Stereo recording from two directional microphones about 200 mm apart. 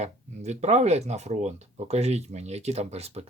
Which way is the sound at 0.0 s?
35° right (ahead or behind).